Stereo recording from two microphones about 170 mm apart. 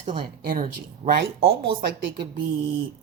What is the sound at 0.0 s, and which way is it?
Speech, 30° right (ahead or behind).